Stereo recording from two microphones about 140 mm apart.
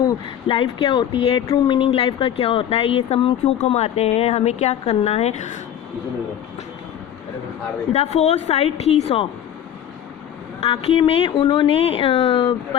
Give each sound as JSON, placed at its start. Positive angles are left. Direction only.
{"t": 0.4, "sound": "speech", "side_deg": 40}
{"t": 7.9, "sound": "speech", "side_deg": 50}
{"t": 10.6, "sound": "speech", "side_deg": 40}